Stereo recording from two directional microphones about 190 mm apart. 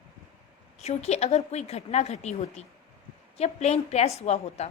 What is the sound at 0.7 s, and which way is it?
A woman's voice, 35° left (ahead or behind).